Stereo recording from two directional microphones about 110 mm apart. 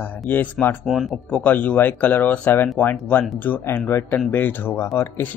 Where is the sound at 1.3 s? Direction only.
15° left (ahead or behind).